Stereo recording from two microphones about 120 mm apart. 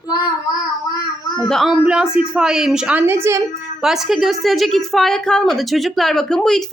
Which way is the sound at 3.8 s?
5° right (ahead or behind).